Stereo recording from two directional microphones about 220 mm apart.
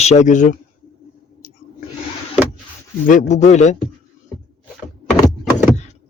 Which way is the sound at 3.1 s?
35° left (ahead or behind).